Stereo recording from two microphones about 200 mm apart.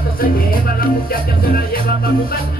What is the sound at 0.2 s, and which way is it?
Music, 45° left (ahead or behind).